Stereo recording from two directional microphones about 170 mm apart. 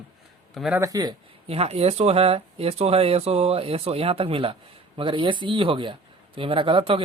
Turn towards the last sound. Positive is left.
turn(degrees=-30)  # may be behind; listen again after turning